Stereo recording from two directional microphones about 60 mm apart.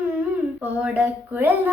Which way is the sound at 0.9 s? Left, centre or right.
Right.